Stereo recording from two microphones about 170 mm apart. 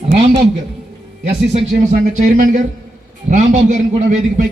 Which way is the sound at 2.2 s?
45° right (ahead or behind).